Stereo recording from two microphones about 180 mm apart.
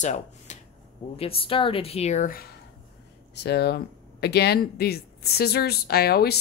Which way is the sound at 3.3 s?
65° left (ahead or behind).